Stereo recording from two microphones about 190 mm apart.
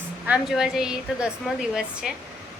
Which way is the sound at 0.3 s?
Centre (ahead or behind).